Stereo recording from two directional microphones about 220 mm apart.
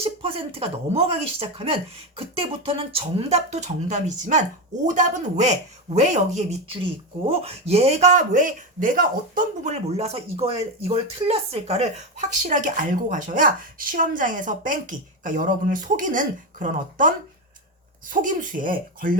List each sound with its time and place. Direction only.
0.0 s a man's voice: 25° right (ahead or behind)